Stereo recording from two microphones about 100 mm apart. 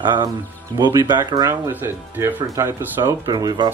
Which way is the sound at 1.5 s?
25° right (ahead or behind).